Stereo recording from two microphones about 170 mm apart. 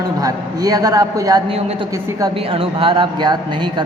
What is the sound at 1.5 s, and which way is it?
A woman's voice, 35° right (ahead or behind).